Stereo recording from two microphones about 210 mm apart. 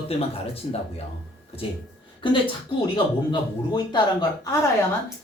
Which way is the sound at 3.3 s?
20° left (ahead or behind).